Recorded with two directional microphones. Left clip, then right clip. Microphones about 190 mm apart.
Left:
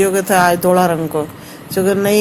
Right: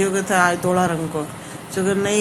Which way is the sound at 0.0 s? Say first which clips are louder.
Left 5 dB; 35° left (ahead or behind).